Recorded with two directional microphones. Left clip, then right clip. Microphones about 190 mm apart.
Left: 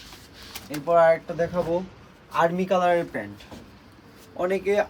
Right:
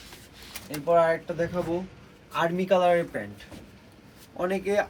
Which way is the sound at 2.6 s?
10° left (ahead or behind).